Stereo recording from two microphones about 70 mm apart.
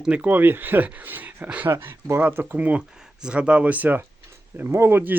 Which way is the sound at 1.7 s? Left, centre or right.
Right.